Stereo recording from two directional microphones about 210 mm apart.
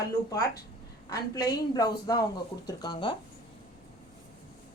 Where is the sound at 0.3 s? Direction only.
15° left (ahead or behind).